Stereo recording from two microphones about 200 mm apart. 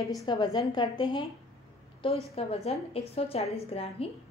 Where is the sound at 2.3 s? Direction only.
30° left (ahead or behind).